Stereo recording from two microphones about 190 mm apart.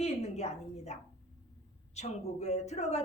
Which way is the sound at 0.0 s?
35° left (ahead or behind).